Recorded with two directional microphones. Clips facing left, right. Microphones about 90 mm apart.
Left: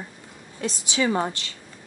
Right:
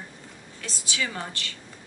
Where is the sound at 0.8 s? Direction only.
30° left (ahead or behind).